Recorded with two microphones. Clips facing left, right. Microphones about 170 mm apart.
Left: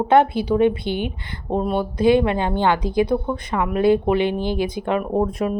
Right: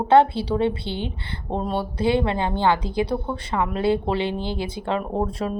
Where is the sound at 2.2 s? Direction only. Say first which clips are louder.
Left 3 dB; 20° right (ahead or behind).